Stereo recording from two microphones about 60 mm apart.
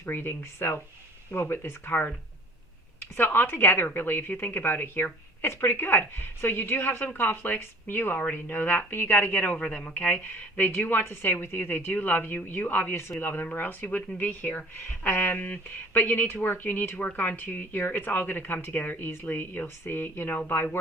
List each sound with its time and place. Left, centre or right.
0.0 s a woman's voice: left
3.0 s a woman's voice: left
9.6 s a woman's voice: centre; by 20.4 s left